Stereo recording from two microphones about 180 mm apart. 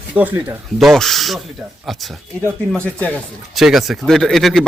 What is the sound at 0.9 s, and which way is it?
Speech, centre (ahead or behind).